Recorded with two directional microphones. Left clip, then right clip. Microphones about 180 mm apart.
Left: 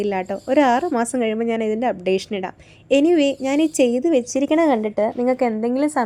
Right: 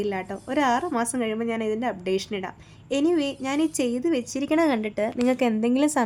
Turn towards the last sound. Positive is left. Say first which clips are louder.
# left 3 dB
turn(degrees=-5)  # may be behind; listen again after turning